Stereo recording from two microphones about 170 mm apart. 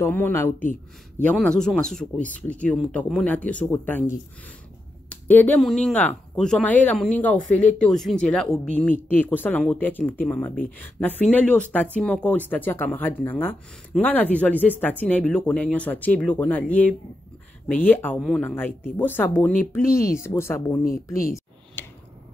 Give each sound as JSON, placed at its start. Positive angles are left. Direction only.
{"t": 0.0, "sound": "speech", "side_deg": 10}
{"t": 5.1, "sound": "speech", "side_deg": 10}